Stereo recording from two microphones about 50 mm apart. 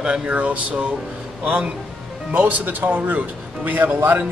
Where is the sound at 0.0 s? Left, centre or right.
Centre.